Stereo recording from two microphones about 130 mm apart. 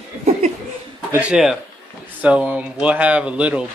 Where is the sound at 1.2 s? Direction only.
5° right (ahead or behind).